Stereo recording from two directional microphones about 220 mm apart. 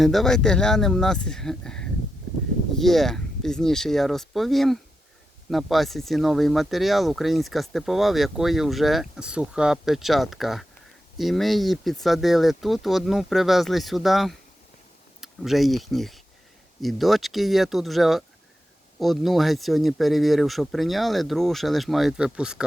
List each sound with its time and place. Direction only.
0.0 s speech: centre (ahead or behind)